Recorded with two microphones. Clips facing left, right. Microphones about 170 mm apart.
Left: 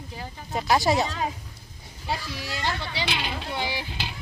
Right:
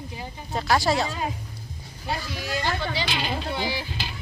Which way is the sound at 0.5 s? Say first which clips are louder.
Left 1 dB; 20° left (ahead or behind).